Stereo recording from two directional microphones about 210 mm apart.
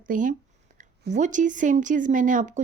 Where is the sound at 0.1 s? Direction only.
40° right (ahead or behind).